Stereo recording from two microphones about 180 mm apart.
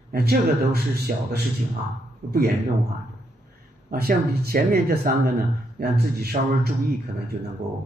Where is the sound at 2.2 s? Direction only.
45° right (ahead or behind).